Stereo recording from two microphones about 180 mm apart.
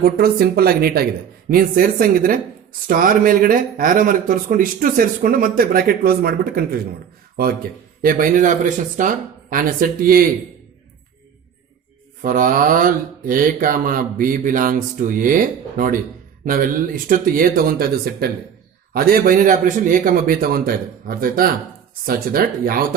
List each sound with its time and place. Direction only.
0.0 s speech: 55° right (ahead or behind)
8.0 s speech: 50° right (ahead or behind)
12.2 s speech: 50° right (ahead or behind)
16.5 s speech: 50° right (ahead or behind)